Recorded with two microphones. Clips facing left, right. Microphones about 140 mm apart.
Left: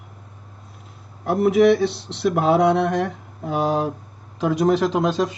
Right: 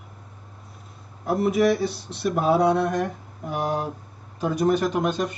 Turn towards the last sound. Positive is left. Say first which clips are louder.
# left 3 dB
turn(degrees=90)